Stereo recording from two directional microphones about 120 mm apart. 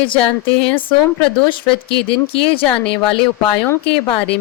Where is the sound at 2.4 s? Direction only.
50° left (ahead or behind).